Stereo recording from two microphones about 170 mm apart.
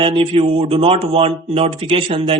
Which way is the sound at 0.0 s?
35° right (ahead or behind).